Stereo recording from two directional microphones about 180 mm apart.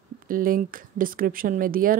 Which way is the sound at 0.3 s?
50° right (ahead or behind).